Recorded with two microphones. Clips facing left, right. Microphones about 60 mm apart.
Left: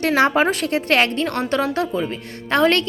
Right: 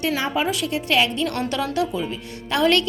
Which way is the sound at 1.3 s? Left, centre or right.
Left.